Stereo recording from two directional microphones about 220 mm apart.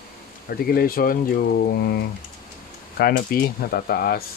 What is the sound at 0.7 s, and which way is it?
Speech, 40° left (ahead or behind).